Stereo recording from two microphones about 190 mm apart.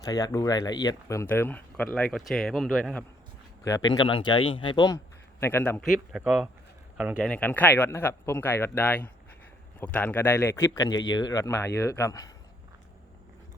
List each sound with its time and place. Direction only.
0.0 s speech: 20° left (ahead or behind); by 3.0 s centre (ahead or behind)
3.6 s speech: 20° left (ahead or behind)
5.4 s speech: 10° left (ahead or behind)
5.9 s speech: centre (ahead or behind)
7.3 s speech: 10° left (ahead or behind)